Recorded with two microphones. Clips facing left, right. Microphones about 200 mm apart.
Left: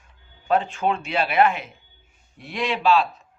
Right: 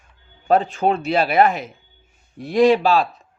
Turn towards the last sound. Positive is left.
turn(degrees=-40)  # may be behind; listen again after turning